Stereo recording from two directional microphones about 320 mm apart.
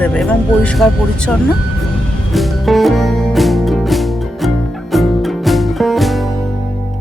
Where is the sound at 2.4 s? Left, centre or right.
Centre.